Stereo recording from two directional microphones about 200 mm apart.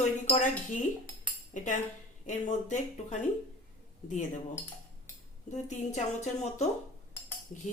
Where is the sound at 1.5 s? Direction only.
40° left (ahead or behind).